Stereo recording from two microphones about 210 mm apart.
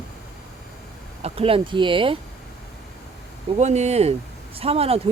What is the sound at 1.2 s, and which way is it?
Speech, 25° right (ahead or behind).